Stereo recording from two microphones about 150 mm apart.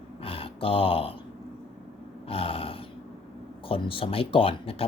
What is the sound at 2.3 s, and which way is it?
Speech, 40° left (ahead or behind).